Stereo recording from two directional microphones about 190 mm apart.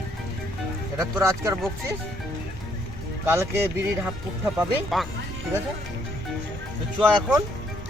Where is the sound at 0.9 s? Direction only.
15° right (ahead or behind).